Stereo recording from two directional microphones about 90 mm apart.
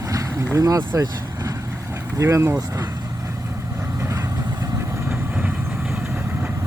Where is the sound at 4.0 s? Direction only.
40° right (ahead or behind).